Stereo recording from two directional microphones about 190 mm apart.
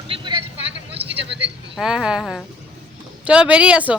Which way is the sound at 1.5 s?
5° right (ahead or behind).